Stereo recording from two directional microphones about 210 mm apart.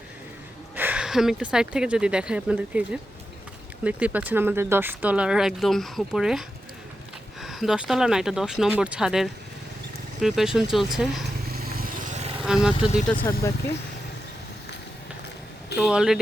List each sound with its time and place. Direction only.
0.8 s speech: 5° right (ahead or behind)
7.4 s speech: centre (ahead or behind)
11.5 s vehicle: 45° right (ahead or behind)
12.5 s speech: 5° right (ahead or behind)
13.1 s speech: 10° left (ahead or behind)
15.8 s speech: centre (ahead or behind)